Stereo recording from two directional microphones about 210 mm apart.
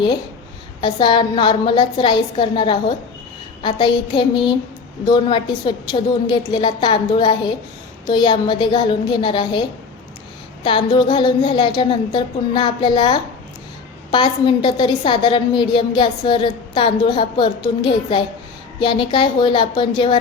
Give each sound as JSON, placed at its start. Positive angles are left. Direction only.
{"t": 0.8, "sound": "a woman's voice", "side_deg": 20}